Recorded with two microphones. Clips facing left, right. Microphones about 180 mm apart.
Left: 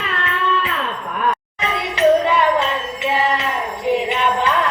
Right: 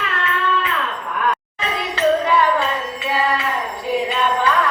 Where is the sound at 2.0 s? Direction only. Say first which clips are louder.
Left 2 dB; 20° left (ahead or behind).